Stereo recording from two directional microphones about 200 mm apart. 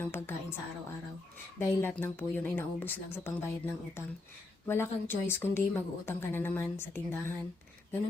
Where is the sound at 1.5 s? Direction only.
10° left (ahead or behind).